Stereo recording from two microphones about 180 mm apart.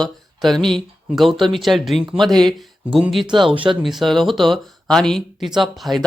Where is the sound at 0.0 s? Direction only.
Centre (ahead or behind).